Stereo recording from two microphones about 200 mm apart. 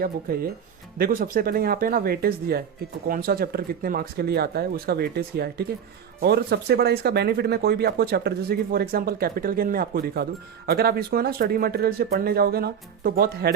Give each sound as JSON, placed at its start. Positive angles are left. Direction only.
{"t": 0.3, "sound": "speech", "side_deg": -50}